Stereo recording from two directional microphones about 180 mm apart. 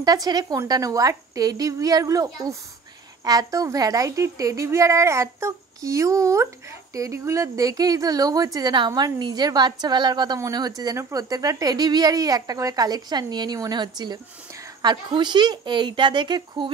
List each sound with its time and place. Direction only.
0.0 s a woman's voice: 20° right (ahead or behind)